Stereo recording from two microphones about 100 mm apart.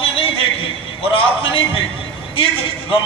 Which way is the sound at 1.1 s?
60° left (ahead or behind).